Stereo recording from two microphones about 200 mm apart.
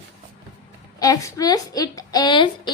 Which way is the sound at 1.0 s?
15° left (ahead or behind).